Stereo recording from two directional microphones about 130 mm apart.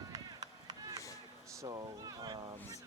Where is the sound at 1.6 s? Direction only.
30° right (ahead or behind).